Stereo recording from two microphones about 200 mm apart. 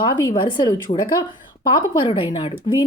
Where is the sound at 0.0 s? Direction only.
25° left (ahead or behind).